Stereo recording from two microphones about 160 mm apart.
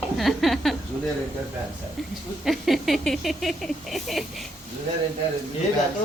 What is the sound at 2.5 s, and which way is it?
A woman's voice, centre (ahead or behind).